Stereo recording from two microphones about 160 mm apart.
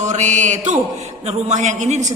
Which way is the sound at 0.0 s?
50° right (ahead or behind).